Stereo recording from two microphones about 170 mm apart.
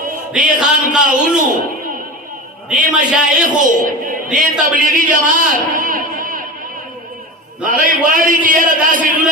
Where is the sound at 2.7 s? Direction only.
50° right (ahead or behind).